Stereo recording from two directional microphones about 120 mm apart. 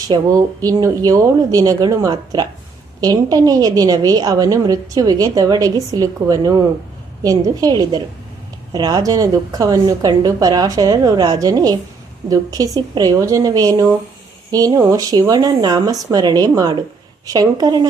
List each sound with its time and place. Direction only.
0.1 s a woman's voice: 30° right (ahead or behind)